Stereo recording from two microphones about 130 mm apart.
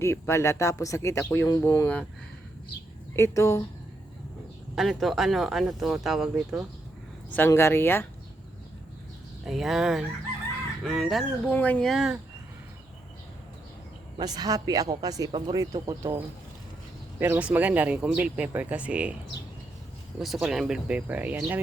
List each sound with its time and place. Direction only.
0.0 s speech: 20° left (ahead or behind)
3.2 s speech: 20° left (ahead or behind)
4.7 s speech: centre (ahead or behind)
7.3 s speech: 20° left (ahead or behind)
9.4 s speech: centre (ahead or behind)
11.5 s speech: 10° left (ahead or behind)
11.9 s speech: 5° right (ahead or behind)
14.2 s speech: 30° right (ahead or behind)
17.2 s speech: 15° right (ahead or behind)
20.1 s speech: centre (ahead or behind)